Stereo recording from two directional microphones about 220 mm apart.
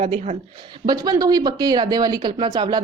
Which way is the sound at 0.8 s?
15° right (ahead or behind).